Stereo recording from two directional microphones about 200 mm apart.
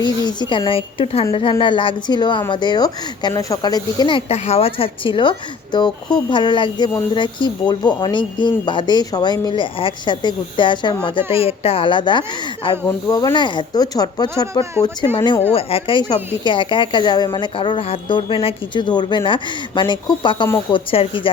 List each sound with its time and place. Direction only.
0.0 s speech: 20° left (ahead or behind)